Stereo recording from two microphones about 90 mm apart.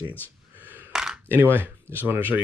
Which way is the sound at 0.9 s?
5° right (ahead or behind).